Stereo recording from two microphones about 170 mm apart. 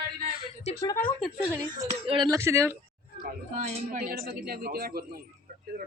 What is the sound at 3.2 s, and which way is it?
Speech, 40° right (ahead or behind).